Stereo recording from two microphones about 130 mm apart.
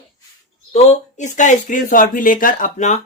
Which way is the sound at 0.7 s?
60° left (ahead or behind).